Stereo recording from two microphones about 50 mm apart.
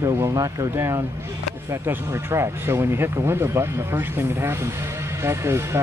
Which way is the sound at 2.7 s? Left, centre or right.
Right.